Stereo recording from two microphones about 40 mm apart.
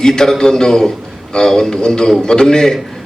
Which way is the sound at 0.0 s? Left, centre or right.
Centre.